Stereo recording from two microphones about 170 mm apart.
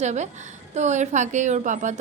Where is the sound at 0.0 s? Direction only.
45° right (ahead or behind).